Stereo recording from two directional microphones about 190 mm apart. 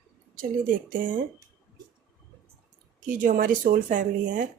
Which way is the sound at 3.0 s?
45° right (ahead or behind).